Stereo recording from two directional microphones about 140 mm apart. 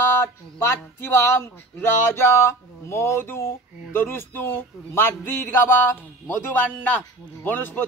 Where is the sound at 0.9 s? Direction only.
15° left (ahead or behind).